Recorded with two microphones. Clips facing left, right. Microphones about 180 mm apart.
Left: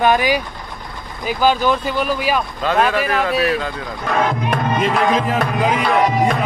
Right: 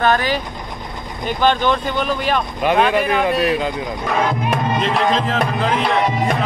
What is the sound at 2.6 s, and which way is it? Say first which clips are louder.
Speech: right 2 dB; 15° right (ahead or behind).